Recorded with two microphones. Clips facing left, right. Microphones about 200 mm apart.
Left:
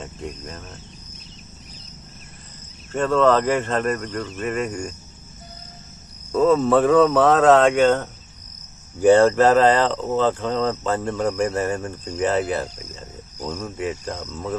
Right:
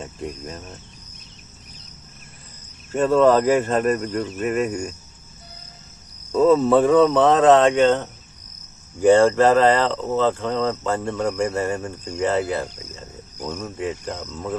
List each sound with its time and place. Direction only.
0.0 s speech: centre (ahead or behind)
2.9 s speech: 10° right (ahead or behind)
6.3 s speech: centre (ahead or behind)
9.0 s speech: 15° right (ahead or behind)
9.9 s speech: 15° left (ahead or behind)
10.2 s speech: 15° right (ahead or behind)